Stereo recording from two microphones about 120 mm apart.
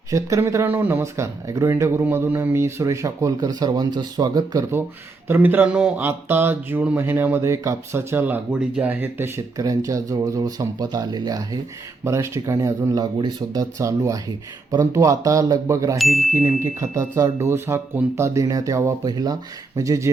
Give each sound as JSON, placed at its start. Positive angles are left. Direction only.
{"t": 0.1, "sound": "speech", "side_deg": -25}
{"t": 5.3, "sound": "speech", "side_deg": -15}